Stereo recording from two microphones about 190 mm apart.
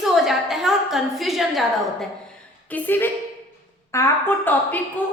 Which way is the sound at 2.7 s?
10° left (ahead or behind).